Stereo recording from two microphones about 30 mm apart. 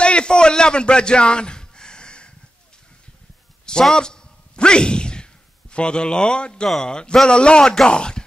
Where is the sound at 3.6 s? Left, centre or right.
Left.